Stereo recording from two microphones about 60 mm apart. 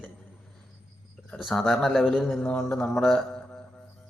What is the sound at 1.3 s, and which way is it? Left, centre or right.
Speech, centre.